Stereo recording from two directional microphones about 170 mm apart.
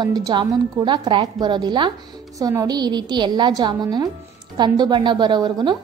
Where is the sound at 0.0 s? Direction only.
25° right (ahead or behind).